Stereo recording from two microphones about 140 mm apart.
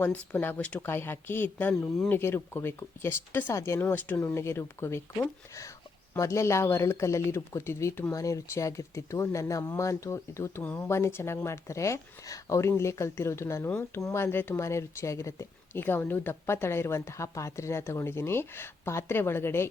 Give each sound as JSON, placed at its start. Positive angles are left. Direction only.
{"t": 0.0, "sound": "speech", "side_deg": 15}